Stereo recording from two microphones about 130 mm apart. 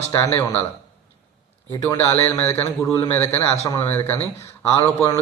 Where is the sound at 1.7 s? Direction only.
25° left (ahead or behind).